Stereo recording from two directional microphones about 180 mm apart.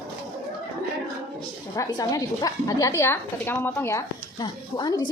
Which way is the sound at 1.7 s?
20° left (ahead or behind).